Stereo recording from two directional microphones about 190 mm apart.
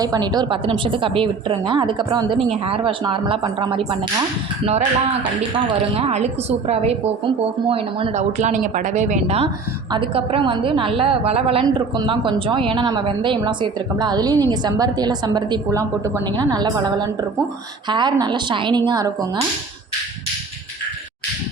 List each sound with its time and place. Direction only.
0.0 s a woman's voice: 20° right (ahead or behind)
5.9 s a woman's voice: 35° right (ahead or behind)